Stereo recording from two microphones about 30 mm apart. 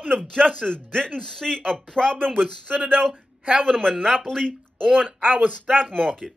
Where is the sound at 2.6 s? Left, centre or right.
Right.